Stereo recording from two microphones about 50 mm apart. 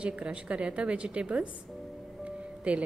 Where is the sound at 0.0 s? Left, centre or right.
Right.